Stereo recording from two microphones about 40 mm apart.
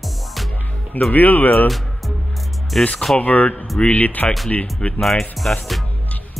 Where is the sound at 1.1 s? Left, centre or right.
Left.